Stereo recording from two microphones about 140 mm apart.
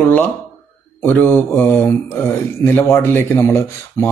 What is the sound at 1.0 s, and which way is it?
Speech, 15° left (ahead or behind).